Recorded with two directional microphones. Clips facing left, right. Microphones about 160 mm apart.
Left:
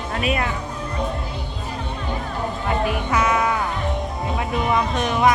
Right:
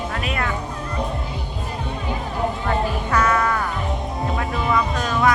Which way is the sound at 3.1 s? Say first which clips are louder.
Right 1 dB; 10° left (ahead or behind).